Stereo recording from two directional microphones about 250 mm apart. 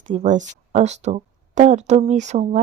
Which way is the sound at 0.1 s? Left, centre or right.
Right.